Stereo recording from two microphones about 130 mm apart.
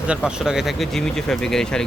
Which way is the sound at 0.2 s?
5° right (ahead or behind).